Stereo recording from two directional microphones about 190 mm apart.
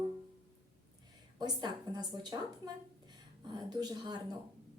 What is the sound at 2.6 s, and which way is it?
A woman's voice, 20° right (ahead or behind).